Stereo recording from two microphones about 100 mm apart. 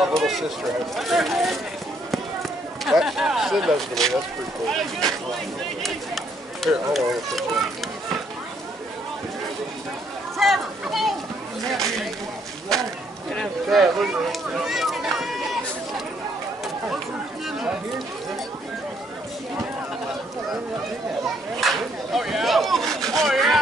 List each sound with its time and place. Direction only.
0.0 s speech: centre (ahead or behind)
2.8 s speech: 5° right (ahead or behind)
5.8 s children playing: centre (ahead or behind)
10.3 s a sound: centre (ahead or behind)
13.3 s speech: centre (ahead or behind)
17.5 s a sound: 5° right (ahead or behind)
21.5 s speech: centre (ahead or behind)